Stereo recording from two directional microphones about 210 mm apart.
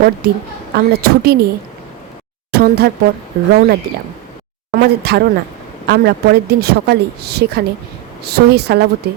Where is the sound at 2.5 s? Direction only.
45° right (ahead or behind).